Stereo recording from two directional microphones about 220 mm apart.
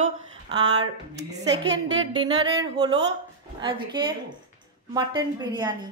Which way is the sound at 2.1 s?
20° right (ahead or behind).